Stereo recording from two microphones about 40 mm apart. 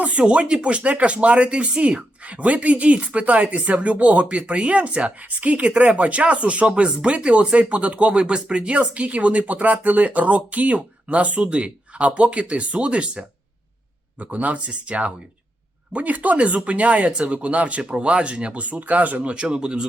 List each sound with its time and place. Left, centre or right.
0.0 s speech: right
14.2 s speech: right
19.2 s speech: right